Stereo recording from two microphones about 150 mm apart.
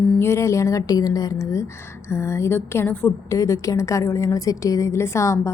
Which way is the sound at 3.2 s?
20° left (ahead or behind).